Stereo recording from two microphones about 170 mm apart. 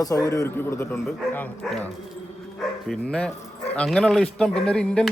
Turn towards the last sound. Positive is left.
turn(degrees=5)  # may be behind; listen again after turning